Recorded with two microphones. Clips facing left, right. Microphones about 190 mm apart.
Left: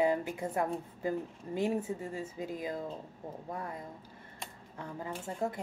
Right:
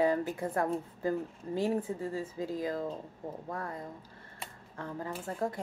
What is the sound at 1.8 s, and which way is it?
Speech, 25° left (ahead or behind).